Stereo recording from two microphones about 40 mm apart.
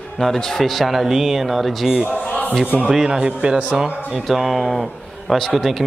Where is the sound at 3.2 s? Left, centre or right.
Right.